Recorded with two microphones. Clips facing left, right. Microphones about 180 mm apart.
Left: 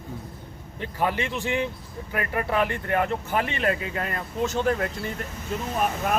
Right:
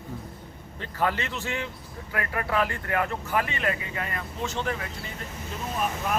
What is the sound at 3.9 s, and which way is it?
Speech, 40° left (ahead or behind).